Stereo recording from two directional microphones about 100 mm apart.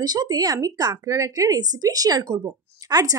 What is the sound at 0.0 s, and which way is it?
Speech, 45° right (ahead or behind).